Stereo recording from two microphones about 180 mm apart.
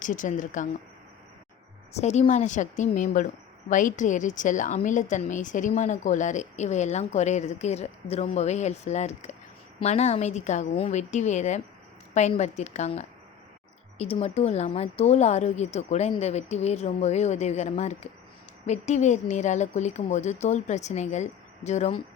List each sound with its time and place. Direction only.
0.0 s a woman's voice: 45° left (ahead or behind)
1.9 s a woman's voice: 40° left (ahead or behind)